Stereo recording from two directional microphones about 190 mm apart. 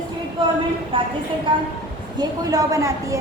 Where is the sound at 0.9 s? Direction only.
25° right (ahead or behind).